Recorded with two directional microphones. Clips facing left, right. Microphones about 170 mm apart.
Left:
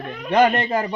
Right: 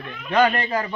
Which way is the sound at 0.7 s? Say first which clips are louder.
Left 3 dB; 25° left (ahead or behind).